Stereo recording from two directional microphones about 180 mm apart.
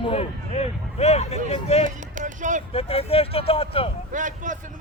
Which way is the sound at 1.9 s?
45° right (ahead or behind).